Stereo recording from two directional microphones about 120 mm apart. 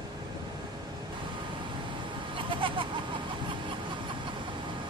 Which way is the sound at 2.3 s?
45° right (ahead or behind).